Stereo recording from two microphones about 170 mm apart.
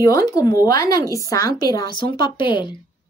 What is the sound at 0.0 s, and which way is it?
Speech, 20° left (ahead or behind).